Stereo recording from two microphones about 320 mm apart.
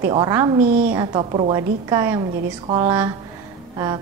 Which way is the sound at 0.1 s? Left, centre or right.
Centre.